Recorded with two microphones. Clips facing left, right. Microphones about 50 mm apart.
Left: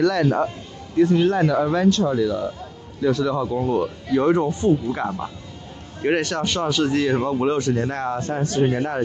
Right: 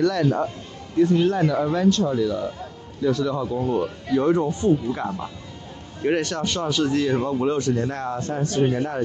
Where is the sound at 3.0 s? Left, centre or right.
Left.